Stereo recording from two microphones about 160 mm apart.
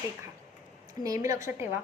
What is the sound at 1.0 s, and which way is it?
Speech, 20° right (ahead or behind).